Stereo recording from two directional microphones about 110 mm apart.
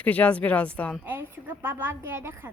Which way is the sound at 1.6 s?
20° right (ahead or behind).